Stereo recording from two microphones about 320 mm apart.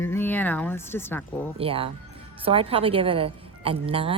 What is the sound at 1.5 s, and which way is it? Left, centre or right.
A woman's voice, centre.